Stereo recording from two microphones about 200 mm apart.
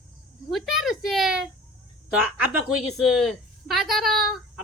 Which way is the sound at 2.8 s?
Centre (ahead or behind).